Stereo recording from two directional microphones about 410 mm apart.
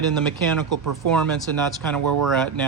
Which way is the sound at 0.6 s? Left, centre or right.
Right.